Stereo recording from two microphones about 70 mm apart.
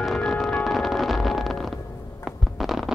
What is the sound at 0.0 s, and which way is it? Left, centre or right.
Music, centre.